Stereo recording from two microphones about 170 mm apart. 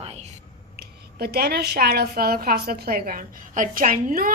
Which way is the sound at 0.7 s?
70° right (ahead or behind).